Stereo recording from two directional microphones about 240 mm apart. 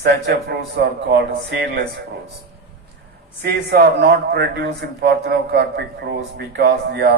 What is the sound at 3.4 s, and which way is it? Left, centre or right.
Speech, right.